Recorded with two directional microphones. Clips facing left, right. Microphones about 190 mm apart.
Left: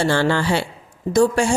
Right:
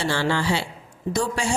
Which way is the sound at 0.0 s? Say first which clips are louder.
Left 5 dB; 55° left (ahead or behind).